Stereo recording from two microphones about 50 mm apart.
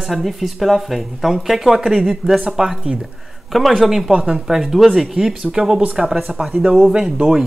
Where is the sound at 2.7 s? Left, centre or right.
Centre.